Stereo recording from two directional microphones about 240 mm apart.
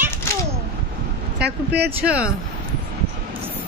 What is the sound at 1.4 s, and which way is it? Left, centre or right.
Speech, right.